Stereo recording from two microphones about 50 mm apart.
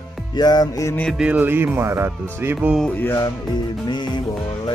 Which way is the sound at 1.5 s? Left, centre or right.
Right.